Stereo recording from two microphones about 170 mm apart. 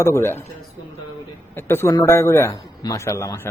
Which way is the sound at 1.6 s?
15° left (ahead or behind).